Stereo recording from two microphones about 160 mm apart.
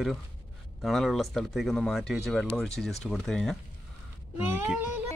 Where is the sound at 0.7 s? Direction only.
Centre (ahead or behind).